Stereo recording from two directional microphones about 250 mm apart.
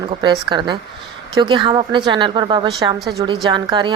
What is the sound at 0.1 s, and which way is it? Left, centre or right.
A woman's voice, centre.